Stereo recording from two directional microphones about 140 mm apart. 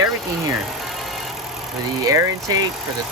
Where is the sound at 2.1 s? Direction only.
25° right (ahead or behind).